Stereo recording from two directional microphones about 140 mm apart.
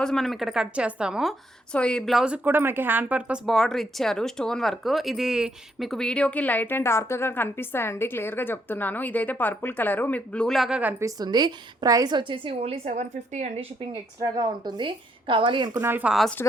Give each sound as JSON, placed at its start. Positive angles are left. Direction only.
{"t": 0.0, "sound": "a woman's voice", "side_deg": 5}
{"t": 11.0, "sound": "a woman's voice", "side_deg": -30}
{"t": 14.2, "sound": "a woman's voice", "side_deg": -30}
{"t": 15.8, "sound": "a woman's voice", "side_deg": -15}
{"t": 16.4, "sound": "speech", "side_deg": 15}